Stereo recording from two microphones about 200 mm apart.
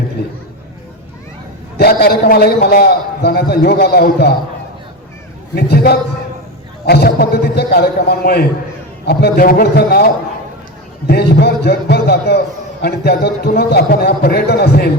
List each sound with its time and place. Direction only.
1.8 s a man's voice: 50° left (ahead or behind)
5.5 s a man's voice: 50° left (ahead or behind)